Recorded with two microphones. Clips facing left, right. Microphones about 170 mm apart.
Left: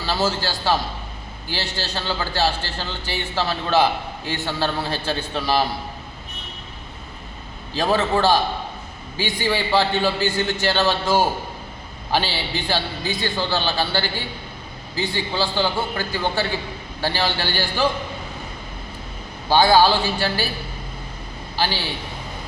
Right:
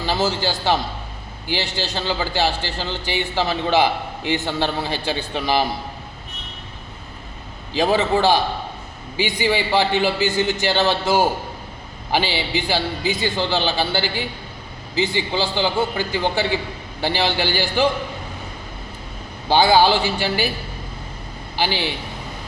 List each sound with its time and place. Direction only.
0.0 s a man's voice: 20° right (ahead or behind)
7.7 s a man's voice: 15° right (ahead or behind)
19.5 s a man's voice: 15° right (ahead or behind)
21.5 s a man's voice: 20° right (ahead or behind)